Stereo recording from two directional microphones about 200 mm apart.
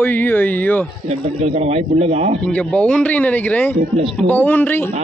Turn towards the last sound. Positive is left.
turn(degrees=10)  # may be behind; listen again after turning